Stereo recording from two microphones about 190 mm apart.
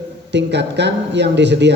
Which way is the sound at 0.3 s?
65° right (ahead or behind).